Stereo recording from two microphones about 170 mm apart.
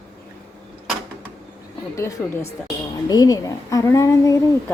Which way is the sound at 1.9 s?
20° left (ahead or behind).